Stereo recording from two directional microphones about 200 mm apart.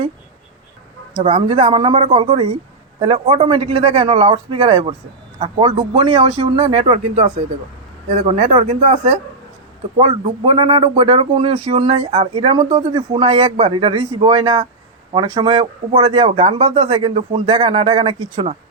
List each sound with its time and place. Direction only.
1.1 s a man's voice: 25° right (ahead or behind)